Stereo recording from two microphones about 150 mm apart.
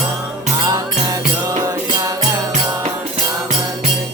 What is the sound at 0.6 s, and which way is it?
Music, 25° right (ahead or behind).